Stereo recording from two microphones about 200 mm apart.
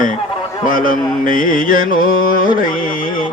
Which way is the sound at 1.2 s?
45° left (ahead or behind).